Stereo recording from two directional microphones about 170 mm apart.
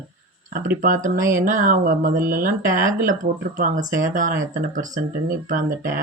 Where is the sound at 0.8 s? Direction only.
50° right (ahead or behind).